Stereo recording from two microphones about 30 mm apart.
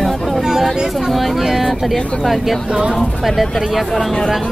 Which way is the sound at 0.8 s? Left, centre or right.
Centre.